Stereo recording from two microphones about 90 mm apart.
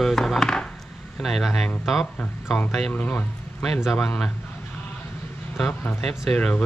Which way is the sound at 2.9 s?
15° left (ahead or behind).